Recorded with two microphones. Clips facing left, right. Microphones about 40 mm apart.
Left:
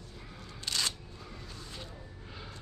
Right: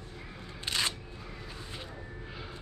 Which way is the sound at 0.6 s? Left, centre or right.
Right.